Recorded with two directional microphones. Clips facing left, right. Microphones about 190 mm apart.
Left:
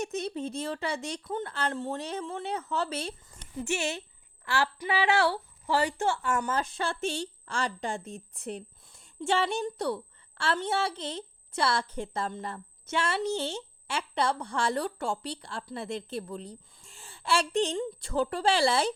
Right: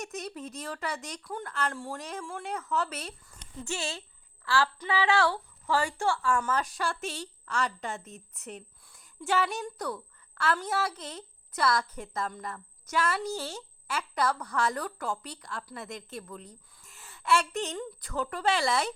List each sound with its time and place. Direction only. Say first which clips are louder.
0.0 s a woman's voice: left 6 dB; 30° left (ahead or behind)
3.8 s a woman's voice: left 4 dB; 15° left (ahead or behind)